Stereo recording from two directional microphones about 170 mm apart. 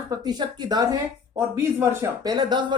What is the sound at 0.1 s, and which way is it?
Speech, 25° right (ahead or behind).